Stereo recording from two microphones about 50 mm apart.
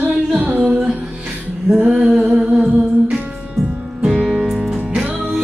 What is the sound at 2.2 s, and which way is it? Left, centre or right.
Humming, centre.